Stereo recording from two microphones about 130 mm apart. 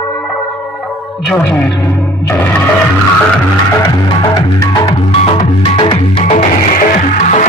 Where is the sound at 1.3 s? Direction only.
10° left (ahead or behind).